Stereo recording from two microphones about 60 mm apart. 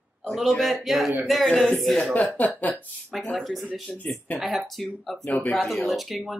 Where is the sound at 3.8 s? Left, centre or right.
Centre.